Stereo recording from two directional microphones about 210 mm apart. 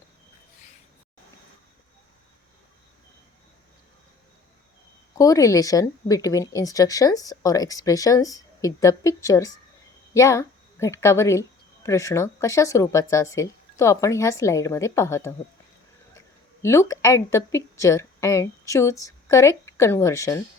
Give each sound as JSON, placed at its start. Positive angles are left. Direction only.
{"t": 5.1, "sound": "a woman's voice", "side_deg": 15}
{"t": 16.6, "sound": "a woman's voice", "side_deg": 15}